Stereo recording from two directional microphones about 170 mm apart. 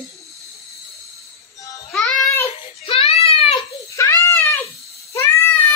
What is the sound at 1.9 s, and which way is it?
Child singing, centre (ahead or behind).